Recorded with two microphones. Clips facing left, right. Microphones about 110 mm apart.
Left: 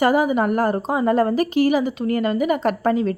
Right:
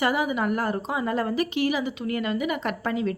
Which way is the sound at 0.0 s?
40° left (ahead or behind).